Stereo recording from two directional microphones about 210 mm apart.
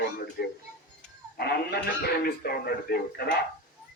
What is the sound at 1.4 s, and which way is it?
Speech, 50° left (ahead or behind).